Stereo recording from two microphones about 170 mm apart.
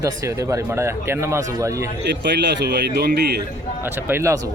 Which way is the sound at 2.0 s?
90° right.